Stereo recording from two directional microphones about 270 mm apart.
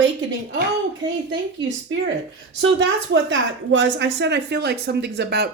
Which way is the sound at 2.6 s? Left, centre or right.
Right.